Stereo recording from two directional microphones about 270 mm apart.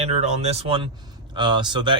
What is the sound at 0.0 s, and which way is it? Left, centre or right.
Speech, right.